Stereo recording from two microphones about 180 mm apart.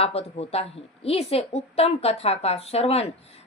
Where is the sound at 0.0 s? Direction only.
35° left (ahead or behind).